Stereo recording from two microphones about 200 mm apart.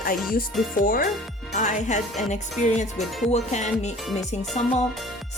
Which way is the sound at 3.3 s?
35° left (ahead or behind).